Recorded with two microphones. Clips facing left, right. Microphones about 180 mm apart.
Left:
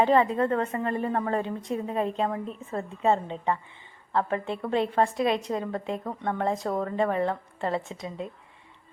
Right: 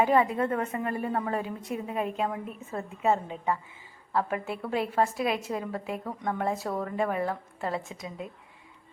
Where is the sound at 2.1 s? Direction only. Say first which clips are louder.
Left 2 dB; 5° right (ahead or behind).